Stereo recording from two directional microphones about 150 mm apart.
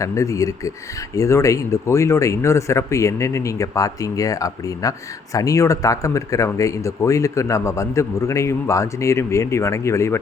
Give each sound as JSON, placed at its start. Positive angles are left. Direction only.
{"t": 0.0, "sound": "speech", "side_deg": 20}